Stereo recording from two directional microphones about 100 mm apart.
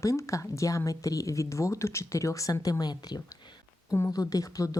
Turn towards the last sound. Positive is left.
turn(degrees=35)  # may be behind; listen again after turning